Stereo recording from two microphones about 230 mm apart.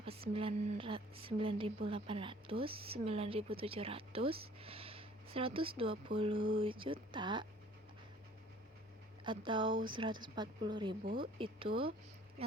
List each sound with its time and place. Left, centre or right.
0.0 s a woman's voice: right
9.2 s a woman's voice: right